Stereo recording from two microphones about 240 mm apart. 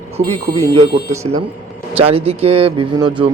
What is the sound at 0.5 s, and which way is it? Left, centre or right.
Speech, right.